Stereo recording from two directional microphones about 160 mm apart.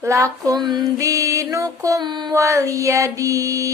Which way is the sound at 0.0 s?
20° right (ahead or behind).